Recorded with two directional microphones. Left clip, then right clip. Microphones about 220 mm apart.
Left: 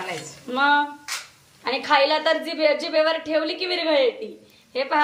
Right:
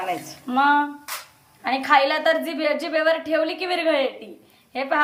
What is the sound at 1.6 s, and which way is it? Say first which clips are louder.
A woman's voice: right 1 dB; 5° right (ahead or behind).